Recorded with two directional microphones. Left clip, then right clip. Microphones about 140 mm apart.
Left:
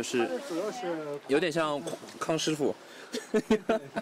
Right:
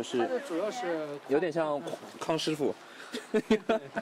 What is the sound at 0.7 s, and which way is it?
Speech, 10° right (ahead or behind).